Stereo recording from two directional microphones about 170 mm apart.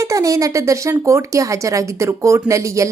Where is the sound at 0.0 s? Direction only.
20° right (ahead or behind).